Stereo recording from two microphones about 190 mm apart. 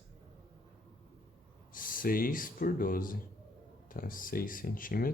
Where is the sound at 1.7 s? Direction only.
45° left (ahead or behind).